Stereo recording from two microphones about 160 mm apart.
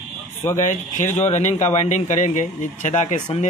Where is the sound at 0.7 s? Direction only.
50° left (ahead or behind).